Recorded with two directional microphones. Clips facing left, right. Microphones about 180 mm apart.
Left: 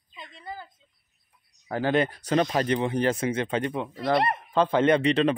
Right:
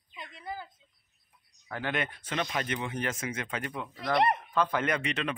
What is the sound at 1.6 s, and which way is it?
Speech, 35° left (ahead or behind).